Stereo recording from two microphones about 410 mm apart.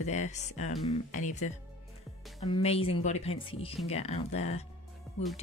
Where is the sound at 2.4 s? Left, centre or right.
Centre.